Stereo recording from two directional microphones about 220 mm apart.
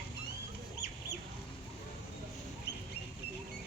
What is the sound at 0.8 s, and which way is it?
Chicken, 45° left (ahead or behind).